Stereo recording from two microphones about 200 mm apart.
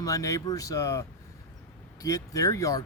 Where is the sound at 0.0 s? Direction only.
15° left (ahead or behind).